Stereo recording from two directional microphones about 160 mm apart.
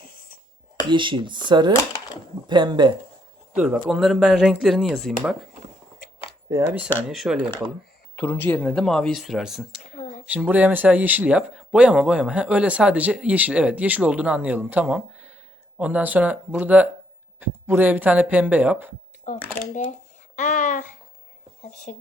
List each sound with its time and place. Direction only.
0.0 s a sound: 65° left (ahead or behind)
0.9 s speech: 30° right (ahead or behind)
3.5 s speech: 10° right (ahead or behind)
6.5 s speech: 10° right (ahead or behind)
7.1 s speech: centre (ahead or behind)
8.1 s speech: 15° left (ahead or behind); by 9.8 s centre (ahead or behind)
9.9 s a sound: 50° left (ahead or behind)
10.2 s speech: 10° right (ahead or behind)
19.3 s speech: 55° left (ahead or behind)